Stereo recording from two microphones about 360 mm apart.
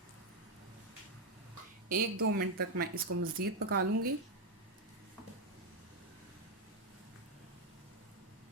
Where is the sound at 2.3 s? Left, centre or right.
Right.